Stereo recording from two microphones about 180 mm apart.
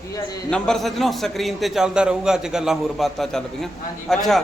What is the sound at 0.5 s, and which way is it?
A man's voice, 5° left (ahead or behind).